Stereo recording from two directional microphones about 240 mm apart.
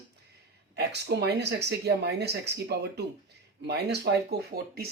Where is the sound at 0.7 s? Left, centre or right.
Right.